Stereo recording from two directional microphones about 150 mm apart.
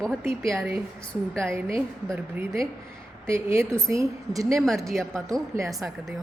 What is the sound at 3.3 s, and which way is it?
A woman's voice, 15° right (ahead or behind).